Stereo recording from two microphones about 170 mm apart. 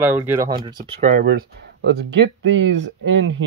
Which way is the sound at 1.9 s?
90° right.